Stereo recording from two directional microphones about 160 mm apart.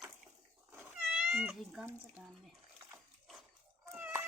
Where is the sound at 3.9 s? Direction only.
10° right (ahead or behind).